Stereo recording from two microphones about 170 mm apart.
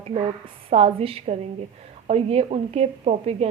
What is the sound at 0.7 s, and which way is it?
A woman's voice, 35° right (ahead or behind).